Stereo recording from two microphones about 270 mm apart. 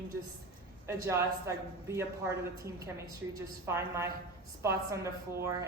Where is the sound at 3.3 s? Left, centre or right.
Centre.